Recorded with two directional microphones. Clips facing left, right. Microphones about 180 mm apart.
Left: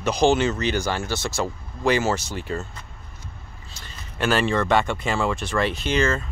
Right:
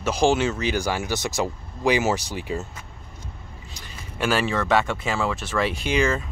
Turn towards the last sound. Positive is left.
turn(degrees=-10)  # may be behind; listen again after turning